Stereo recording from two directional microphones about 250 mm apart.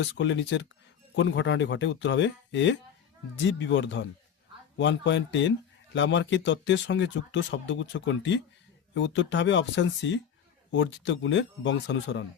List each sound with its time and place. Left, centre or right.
0.0 s speech: left